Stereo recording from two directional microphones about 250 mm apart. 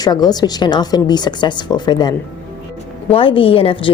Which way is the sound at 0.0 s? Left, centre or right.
Centre.